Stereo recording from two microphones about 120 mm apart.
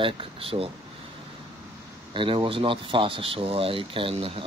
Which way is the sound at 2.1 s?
45° right (ahead or behind).